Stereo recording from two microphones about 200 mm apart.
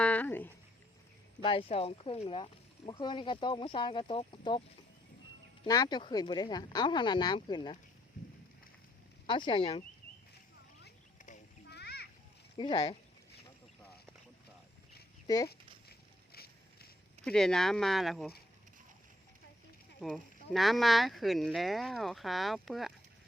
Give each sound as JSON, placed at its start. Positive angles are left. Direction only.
{"t": 0.0, "sound": "a sound", "side_deg": 10}
{"t": 1.4, "sound": "speech", "side_deg": 25}
{"t": 5.6, "sound": "speech", "side_deg": 20}
{"t": 9.2, "sound": "speech", "side_deg": 25}
{"t": 11.7, "sound": "splash", "side_deg": 55}
{"t": 12.5, "sound": "speech", "side_deg": 25}
{"t": 15.9, "sound": "a sound", "side_deg": 50}
{"t": 17.2, "sound": "speech", "side_deg": 5}
{"t": 20.0, "sound": "speech", "side_deg": 0}